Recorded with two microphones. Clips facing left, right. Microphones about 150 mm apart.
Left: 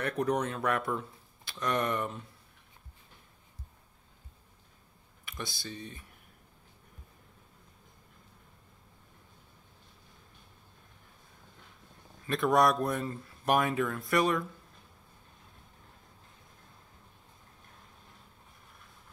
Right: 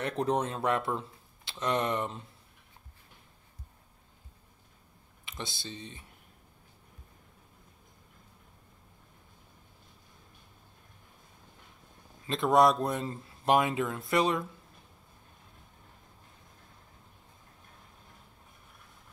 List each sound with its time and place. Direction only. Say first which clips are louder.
0.0 s speech: even; 25° right (ahead or behind)
5.2 s speech: even; 20° right (ahead or behind)
12.3 s speech: right 2 dB; 20° right (ahead or behind)